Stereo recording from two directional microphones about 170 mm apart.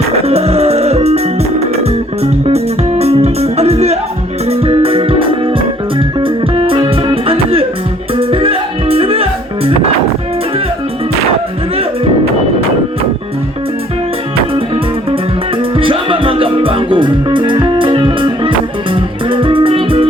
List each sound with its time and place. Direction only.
0.3 s music: 35° right (ahead or behind)
15.1 s music: 30° right (ahead or behind)